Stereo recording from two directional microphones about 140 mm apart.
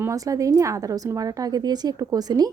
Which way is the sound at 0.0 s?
25° right (ahead or behind).